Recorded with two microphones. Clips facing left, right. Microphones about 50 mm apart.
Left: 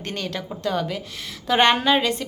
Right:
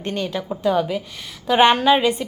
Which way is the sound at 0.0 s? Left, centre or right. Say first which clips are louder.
Right 4 dB; centre.